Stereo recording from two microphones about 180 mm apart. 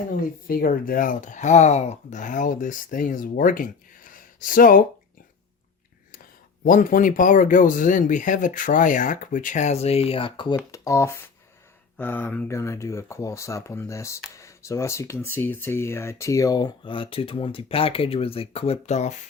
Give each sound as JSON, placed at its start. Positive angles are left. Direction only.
{"t": 0.1, "sound": "speech", "side_deg": 50}
{"t": 6.7, "sound": "speech", "side_deg": 50}